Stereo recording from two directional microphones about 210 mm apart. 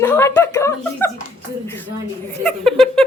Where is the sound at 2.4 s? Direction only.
5° left (ahead or behind).